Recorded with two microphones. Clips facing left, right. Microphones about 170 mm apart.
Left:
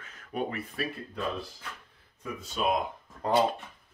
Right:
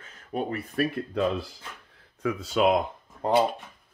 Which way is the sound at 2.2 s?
90° right.